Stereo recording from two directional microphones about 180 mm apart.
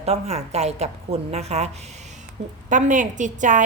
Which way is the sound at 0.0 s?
35° right (ahead or behind).